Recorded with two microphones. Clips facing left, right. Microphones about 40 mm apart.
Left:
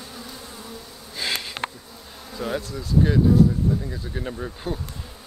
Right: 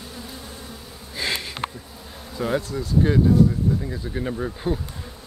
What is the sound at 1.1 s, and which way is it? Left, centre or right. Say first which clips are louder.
Sniff: right 1 dB; centre.